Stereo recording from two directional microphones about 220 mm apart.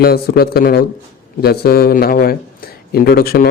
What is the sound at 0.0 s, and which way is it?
A man's voice, 45° left (ahead or behind).